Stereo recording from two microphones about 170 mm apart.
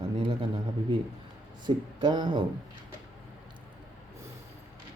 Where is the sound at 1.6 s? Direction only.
25° right (ahead or behind).